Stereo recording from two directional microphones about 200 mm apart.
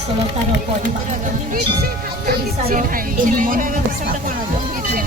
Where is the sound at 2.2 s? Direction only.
50° right (ahead or behind).